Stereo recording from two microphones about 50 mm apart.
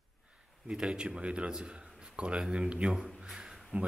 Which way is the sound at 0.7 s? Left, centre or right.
Centre.